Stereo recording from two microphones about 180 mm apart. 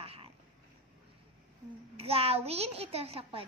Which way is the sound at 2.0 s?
35° right (ahead or behind).